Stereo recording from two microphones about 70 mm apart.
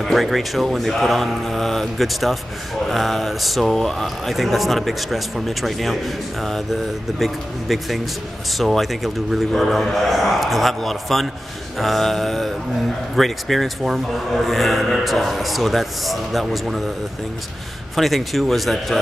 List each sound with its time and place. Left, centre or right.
0.0 s speech: centre
17.9 s speech: centre